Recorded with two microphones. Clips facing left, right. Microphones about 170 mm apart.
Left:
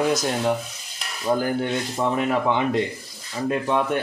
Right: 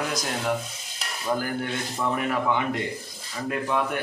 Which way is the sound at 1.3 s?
25° left (ahead or behind).